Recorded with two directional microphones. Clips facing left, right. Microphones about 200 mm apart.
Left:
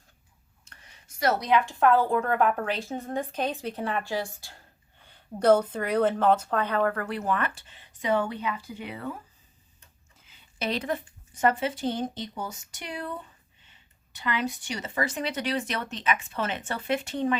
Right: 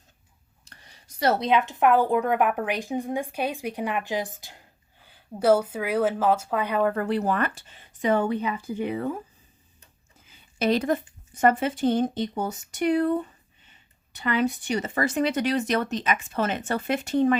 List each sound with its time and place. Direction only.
0.6 s a woman's voice: 35° right (ahead or behind); by 4.6 s 20° right (ahead or behind)
5.0 s a woman's voice: 5° right (ahead or behind)
6.9 s speech: 30° right (ahead or behind)
8.0 s speech: 50° right (ahead or behind)
10.6 s speech: 45° right (ahead or behind)